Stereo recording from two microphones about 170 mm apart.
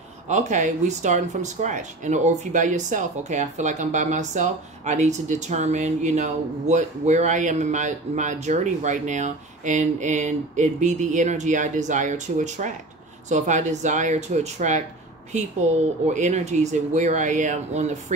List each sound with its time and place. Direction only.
0.3 s speech: 45° right (ahead or behind)